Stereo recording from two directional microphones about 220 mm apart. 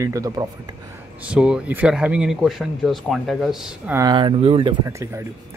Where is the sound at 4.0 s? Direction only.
20° right (ahead or behind).